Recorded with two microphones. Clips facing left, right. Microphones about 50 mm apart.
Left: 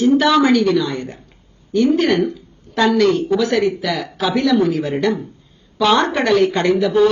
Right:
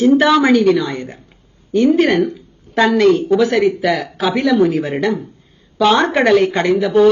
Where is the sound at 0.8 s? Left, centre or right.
Right.